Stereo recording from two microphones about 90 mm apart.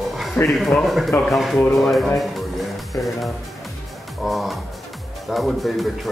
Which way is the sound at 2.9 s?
35° left (ahead or behind).